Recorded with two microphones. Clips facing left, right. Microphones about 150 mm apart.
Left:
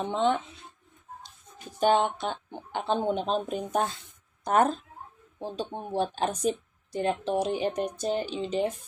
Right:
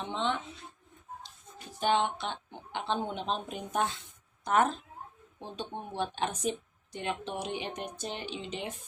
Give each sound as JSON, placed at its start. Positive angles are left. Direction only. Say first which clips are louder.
{"t": 0.0, "sound": "speech", "louder": "left 7 dB", "side_deg": 45}
{"t": 1.8, "sound": "speech", "louder": "left 5 dB", "side_deg": 45}